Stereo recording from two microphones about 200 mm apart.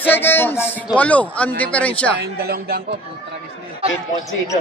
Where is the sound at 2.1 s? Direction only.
55° right (ahead or behind).